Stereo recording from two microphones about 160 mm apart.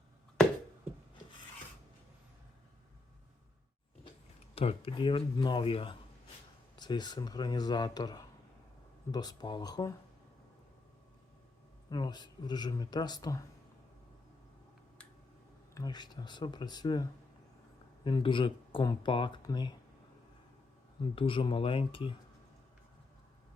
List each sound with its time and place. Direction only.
4.5 s speech: 35° left (ahead or behind)
11.9 s speech: 25° left (ahead or behind)
15.7 s speech: 25° left (ahead or behind)
21.0 s speech: 35° left (ahead or behind)